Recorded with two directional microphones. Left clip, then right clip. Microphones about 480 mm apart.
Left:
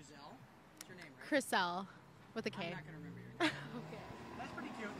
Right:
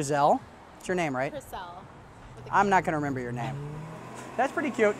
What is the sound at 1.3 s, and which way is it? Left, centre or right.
Speech, left.